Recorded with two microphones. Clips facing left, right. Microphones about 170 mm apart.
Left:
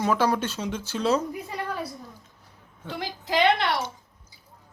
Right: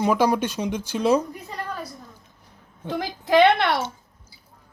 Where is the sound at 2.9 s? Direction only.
50° right (ahead or behind).